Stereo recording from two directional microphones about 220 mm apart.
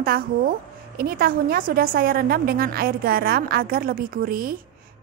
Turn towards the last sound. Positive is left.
turn(degrees=-40)  # may be behind; listen again after turning